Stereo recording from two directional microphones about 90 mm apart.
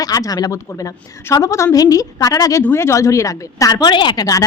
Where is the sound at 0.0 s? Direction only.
45° left (ahead or behind).